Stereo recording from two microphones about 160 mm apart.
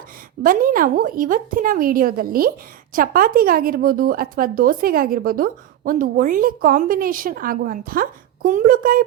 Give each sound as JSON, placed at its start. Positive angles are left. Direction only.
{"t": 0.4, "sound": "a woman's voice", "side_deg": -60}